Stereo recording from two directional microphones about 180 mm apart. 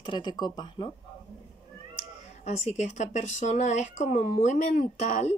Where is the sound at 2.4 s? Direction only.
40° left (ahead or behind).